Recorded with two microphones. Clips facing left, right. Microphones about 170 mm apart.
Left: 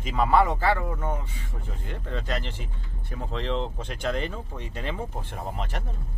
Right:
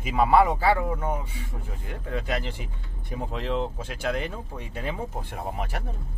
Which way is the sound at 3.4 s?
5° right (ahead or behind).